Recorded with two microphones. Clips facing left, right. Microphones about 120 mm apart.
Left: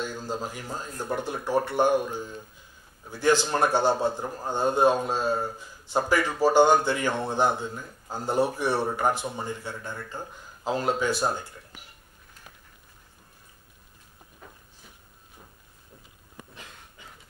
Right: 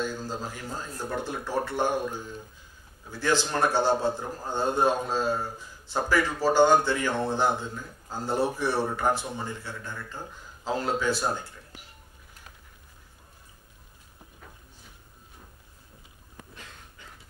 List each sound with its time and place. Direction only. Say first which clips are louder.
0.0 s a man's voice: even; 15° left (ahead or behind)